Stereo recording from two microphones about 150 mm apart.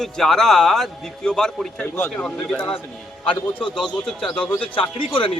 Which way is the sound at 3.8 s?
Centre (ahead or behind).